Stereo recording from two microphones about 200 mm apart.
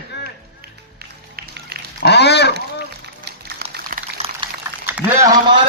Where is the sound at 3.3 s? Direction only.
55° right (ahead or behind).